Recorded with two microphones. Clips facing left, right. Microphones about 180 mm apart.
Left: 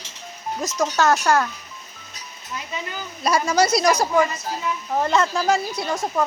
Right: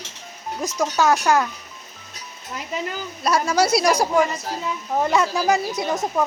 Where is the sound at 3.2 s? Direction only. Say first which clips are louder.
Even; centre (ahead or behind).